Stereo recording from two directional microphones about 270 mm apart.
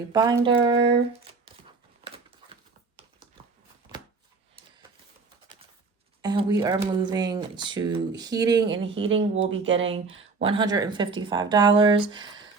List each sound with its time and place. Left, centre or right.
0.1 s speech: centre
2.0 s a sound: centre
6.2 s speech: centre